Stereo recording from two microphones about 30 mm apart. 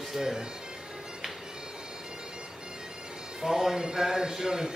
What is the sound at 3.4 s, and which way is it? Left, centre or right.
Speech, centre.